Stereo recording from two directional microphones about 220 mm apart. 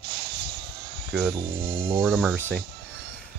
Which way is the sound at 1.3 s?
20° right (ahead or behind).